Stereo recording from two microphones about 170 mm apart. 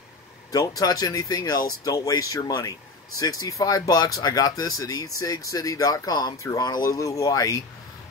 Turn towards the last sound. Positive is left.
turn(degrees=20)  # may be behind; listen again after turning